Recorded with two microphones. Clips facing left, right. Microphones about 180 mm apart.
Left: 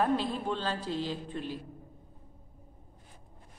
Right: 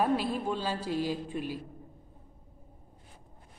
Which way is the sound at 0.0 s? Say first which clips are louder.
Right 1 dB; 10° right (ahead or behind).